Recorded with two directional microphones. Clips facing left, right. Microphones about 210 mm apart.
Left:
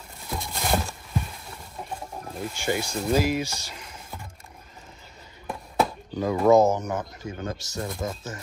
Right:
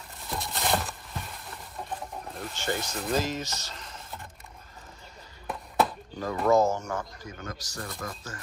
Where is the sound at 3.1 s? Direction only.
10° left (ahead or behind).